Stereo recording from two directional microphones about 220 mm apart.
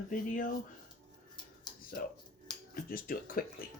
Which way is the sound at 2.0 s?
40° left (ahead or behind).